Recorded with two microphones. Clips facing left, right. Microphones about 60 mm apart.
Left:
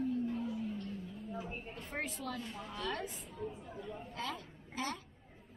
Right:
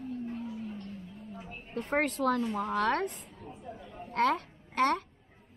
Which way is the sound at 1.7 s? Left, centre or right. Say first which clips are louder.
Right 15 dB; right.